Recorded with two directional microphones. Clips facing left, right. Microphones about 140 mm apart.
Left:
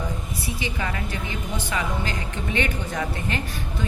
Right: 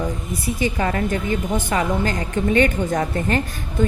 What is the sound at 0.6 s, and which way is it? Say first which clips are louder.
A woman's voice: right 10 dB; 40° right (ahead or behind).